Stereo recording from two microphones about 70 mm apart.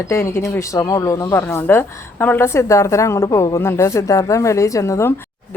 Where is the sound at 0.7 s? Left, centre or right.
Left.